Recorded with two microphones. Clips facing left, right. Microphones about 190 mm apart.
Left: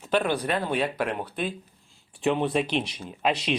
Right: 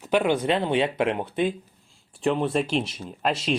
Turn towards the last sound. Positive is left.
turn(degrees=0)  # may be behind; listen again after turning